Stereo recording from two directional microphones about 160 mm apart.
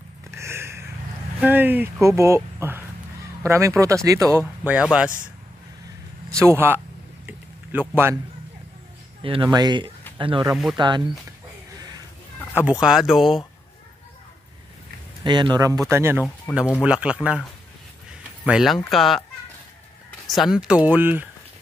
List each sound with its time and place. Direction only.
0.3 s a sound: 15° right (ahead or behind)
1.4 s speech: 10° right (ahead or behind)
6.3 s speech: 15° right (ahead or behind)
7.2 s a sound: 10° right (ahead or behind)
9.2 s speech: 35° right (ahead or behind)
10.5 s speech: centre (ahead or behind)
12.8 s speech: centre (ahead or behind)
15.2 s speech: 25° right (ahead or behind); by 19.2 s centre (ahead or behind)
20.2 s speech: centre (ahead or behind)